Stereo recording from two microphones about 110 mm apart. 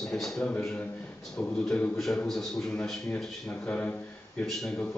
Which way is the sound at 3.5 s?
15° left (ahead or behind).